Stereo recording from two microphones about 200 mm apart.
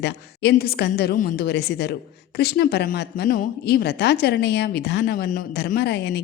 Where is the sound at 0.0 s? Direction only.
55° left (ahead or behind).